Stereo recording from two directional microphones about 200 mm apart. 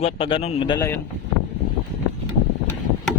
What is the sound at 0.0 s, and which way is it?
Speech, 25° left (ahead or behind).